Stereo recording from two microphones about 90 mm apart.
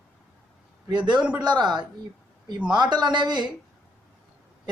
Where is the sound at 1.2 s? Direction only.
10° right (ahead or behind).